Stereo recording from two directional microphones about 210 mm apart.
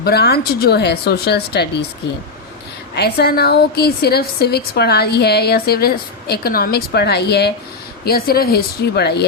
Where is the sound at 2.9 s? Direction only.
50° left (ahead or behind).